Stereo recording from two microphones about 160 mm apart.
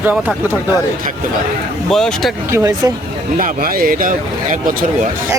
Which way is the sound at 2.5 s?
20° right (ahead or behind).